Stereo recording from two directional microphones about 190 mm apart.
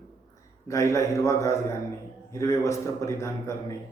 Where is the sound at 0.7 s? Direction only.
15° left (ahead or behind).